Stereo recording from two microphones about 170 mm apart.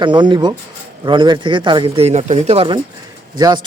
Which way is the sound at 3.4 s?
25° right (ahead or behind).